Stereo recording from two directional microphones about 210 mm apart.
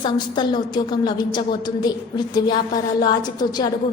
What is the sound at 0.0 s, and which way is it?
A woman's voice, 20° left (ahead or behind).